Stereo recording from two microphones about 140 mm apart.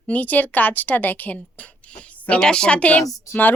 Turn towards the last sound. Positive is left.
turn(degrees=15)  # may be behind; listen again after turning